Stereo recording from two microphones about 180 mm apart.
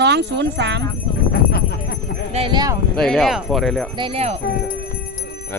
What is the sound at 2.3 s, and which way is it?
Speech, 30° right (ahead or behind).